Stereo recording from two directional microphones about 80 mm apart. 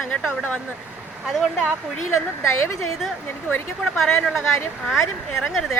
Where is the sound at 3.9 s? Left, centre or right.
Centre.